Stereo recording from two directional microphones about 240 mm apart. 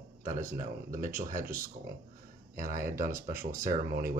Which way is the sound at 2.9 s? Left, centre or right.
Right.